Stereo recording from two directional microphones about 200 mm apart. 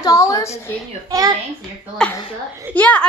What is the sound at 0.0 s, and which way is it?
Speech, 15° left (ahead or behind).